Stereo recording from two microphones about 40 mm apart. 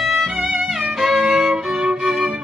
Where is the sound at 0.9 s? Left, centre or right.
Centre.